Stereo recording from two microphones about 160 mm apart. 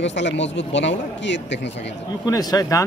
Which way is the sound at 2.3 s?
25° left (ahead or behind).